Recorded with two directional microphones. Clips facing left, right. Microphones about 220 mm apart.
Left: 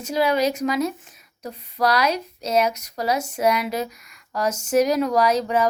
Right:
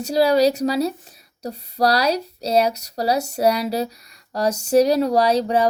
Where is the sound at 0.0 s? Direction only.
35° right (ahead or behind).